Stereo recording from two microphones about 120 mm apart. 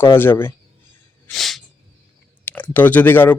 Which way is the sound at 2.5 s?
15° left (ahead or behind).